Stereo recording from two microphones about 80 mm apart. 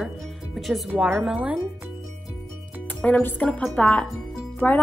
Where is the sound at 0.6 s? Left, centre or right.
Centre.